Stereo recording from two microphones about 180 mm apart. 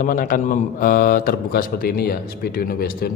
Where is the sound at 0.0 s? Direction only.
50° left (ahead or behind).